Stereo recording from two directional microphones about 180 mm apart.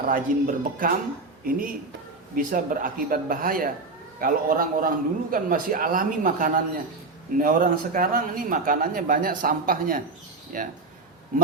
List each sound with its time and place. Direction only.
0.1 s speech: 50° right (ahead or behind)